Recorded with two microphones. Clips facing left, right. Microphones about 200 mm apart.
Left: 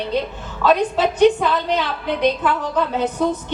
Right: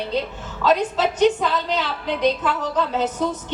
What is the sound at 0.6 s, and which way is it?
A woman's voice, 60° left (ahead or behind).